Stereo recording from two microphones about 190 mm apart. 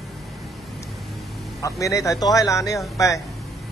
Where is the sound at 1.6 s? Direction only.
15° left (ahead or behind).